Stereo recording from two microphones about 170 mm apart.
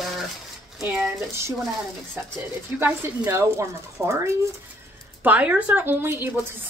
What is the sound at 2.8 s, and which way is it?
A woman's voice, 15° right (ahead or behind).